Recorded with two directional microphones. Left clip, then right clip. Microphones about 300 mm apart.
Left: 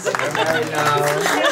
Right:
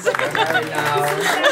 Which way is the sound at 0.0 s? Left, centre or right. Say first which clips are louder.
Right 1 dB; centre.